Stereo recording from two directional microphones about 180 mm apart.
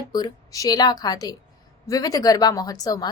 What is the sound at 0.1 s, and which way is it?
A woman's voice, 20° left (ahead or behind).